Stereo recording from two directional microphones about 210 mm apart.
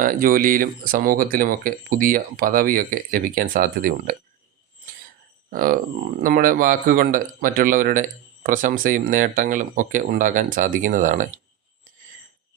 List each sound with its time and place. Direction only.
0.0 s speech: 40° right (ahead or behind)
5.5 s speech: 40° right (ahead or behind)